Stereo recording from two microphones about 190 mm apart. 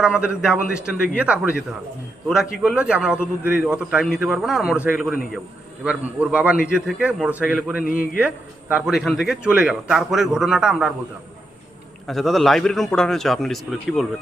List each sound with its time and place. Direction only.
0.0 s a man's voice: 5° right (ahead or behind)
7.8 s a man's voice: 50° left (ahead or behind)
8.7 s a man's voice: centre (ahead or behind)
12.0 s a man's voice: centre (ahead or behind)